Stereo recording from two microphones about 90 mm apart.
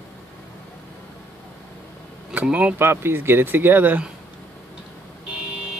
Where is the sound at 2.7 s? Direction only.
25° right (ahead or behind).